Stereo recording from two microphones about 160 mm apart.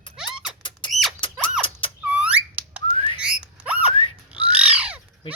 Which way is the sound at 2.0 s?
5° right (ahead or behind).